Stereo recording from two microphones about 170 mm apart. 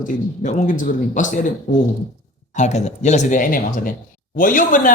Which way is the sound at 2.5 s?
45° left (ahead or behind).